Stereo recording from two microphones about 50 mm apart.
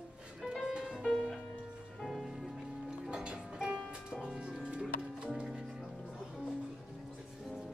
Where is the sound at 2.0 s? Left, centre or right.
Centre.